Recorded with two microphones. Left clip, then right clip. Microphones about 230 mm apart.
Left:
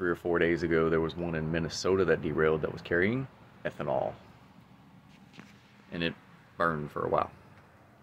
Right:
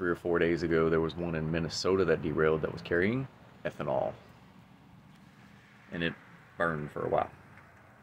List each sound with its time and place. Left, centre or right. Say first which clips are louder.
0.0 s speech: left 1 dB; centre
5.9 s speech: left 1 dB; centre